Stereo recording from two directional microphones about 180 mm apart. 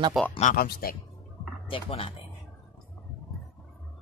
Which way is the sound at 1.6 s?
30° left (ahead or behind).